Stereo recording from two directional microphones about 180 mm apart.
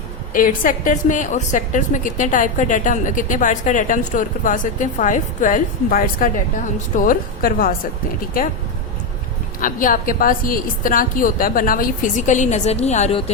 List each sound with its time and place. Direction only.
0.3 s a woman's voice: 50° left (ahead or behind)
9.6 s a woman's voice: 50° left (ahead or behind)